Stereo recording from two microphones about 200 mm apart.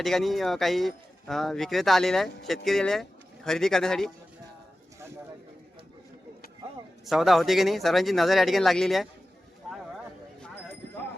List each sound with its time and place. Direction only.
0.0 s a man's voice: centre (ahead or behind)
7.0 s a man's voice: centre (ahead or behind)